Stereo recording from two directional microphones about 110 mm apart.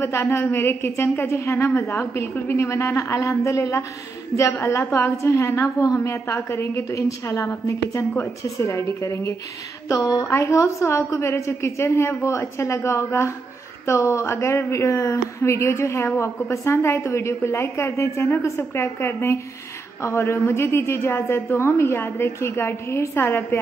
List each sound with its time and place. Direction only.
0.0 s a woman's voice: 25° left (ahead or behind)